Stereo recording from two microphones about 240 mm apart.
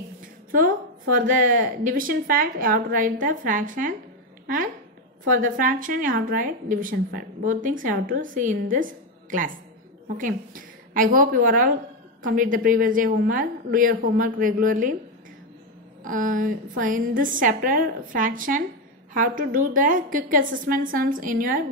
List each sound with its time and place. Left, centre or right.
0.5 s a woman's voice: right
5.3 s a woman's voice: right
16.0 s a woman's voice: right